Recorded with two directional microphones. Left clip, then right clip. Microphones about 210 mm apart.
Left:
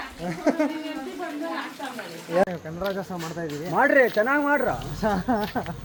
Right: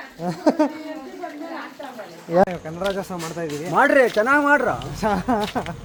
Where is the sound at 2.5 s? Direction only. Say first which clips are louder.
Right 4 dB; centre (ahead or behind).